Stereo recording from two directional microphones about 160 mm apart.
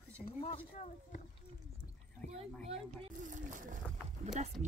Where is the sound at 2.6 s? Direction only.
45° right (ahead or behind).